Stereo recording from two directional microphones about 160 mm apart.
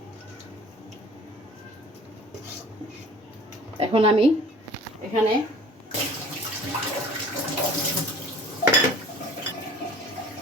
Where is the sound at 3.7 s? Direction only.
35° right (ahead or behind).